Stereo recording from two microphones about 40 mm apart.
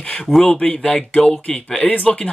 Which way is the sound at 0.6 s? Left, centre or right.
Left.